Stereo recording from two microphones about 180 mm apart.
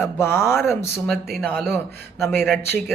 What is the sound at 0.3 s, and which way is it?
Speech, 15° left (ahead or behind).